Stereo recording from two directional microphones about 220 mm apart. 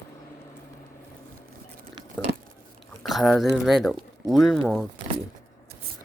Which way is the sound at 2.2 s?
5° left (ahead or behind).